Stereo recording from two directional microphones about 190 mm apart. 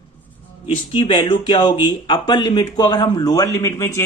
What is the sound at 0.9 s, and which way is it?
Speech, 25° left (ahead or behind).